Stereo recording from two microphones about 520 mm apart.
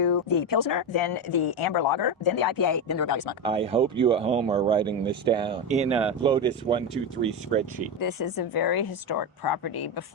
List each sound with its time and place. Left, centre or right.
0.0 s speech: left
3.4 s speech: centre
7.9 s speech: left